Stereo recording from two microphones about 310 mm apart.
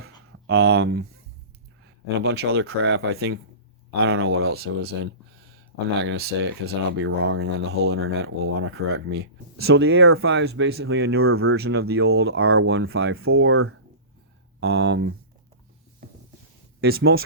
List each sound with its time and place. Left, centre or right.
0.0 s a sound: right
2.2 s speech: right
16.8 s speech: right